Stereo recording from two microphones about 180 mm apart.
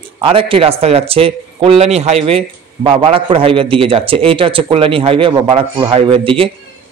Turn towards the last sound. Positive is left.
turn(degrees=-30)  # may be behind; listen again after turning